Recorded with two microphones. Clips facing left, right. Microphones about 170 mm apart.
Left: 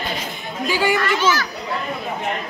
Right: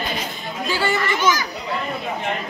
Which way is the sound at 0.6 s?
10° left (ahead or behind).